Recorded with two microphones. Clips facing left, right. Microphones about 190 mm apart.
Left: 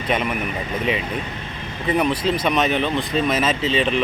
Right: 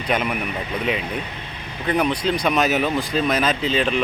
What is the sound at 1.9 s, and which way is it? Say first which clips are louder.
Speech: left 1 dB; centre (ahead or behind).